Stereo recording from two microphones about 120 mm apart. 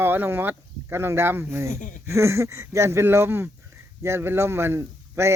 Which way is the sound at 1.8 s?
90° left.